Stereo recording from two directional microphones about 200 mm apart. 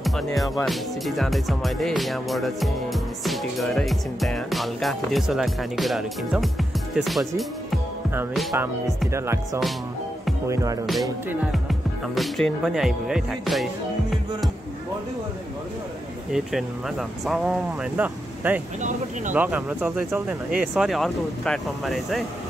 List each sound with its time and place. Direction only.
0.0 s music: centre (ahead or behind)
0.7 s speech: centre (ahead or behind)
9.1 s speech: 15° right (ahead or behind)
10.9 s speech: centre (ahead or behind)
16.3 s speech: centre (ahead or behind)
18.8 s speech: 40° right (ahead or behind)
19.3 s speech: 5° right (ahead or behind)